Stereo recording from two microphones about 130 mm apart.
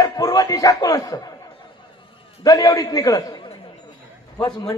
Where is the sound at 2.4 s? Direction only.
25° left (ahead or behind).